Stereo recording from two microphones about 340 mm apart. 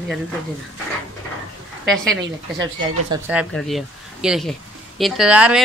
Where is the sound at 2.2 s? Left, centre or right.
Right.